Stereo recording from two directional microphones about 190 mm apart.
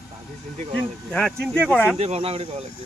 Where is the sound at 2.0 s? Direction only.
30° right (ahead or behind).